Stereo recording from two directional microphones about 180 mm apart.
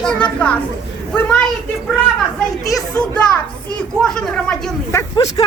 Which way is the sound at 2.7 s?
5° left (ahead or behind).